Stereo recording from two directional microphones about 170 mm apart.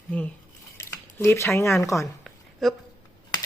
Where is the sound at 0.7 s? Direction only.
15° left (ahead or behind).